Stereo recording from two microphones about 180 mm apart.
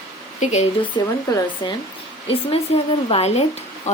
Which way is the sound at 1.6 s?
25° left (ahead or behind).